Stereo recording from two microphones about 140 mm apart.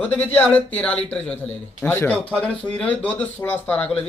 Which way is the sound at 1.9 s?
20° left (ahead or behind).